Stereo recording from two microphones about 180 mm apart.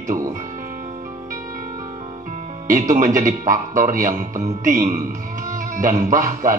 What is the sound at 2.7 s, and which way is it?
Speech, 45° right (ahead or behind).